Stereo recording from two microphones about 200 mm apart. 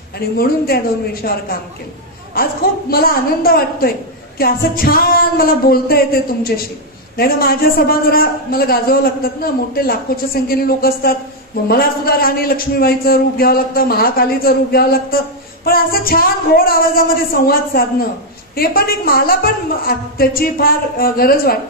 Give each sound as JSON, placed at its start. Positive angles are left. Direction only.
{"t": 0.2, "sound": "a man's voice", "side_deg": 50}
{"t": 2.9, "sound": "a man's voice", "side_deg": 50}